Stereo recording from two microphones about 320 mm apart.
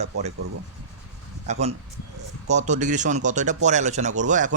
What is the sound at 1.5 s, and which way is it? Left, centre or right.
Speech, right.